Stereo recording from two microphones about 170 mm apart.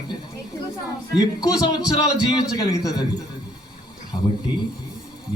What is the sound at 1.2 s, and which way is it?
A man's voice, 25° left (ahead or behind).